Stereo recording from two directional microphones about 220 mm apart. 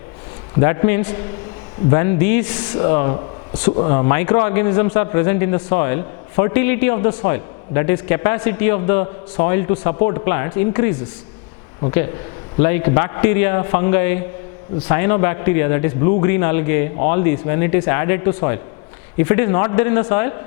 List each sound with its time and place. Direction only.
0.6 s a man's voice: 15° left (ahead or behind)
12.6 s a man's voice: 15° left (ahead or behind)